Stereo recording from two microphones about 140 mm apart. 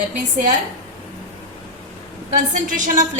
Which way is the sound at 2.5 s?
70° right (ahead or behind).